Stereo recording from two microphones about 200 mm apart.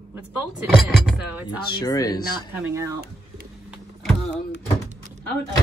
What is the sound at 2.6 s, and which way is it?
Speech, 15° right (ahead or behind).